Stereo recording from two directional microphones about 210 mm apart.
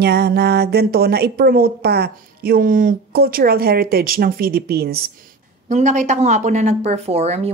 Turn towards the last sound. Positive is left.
turn(degrees=-30)  # may be behind; listen again after turning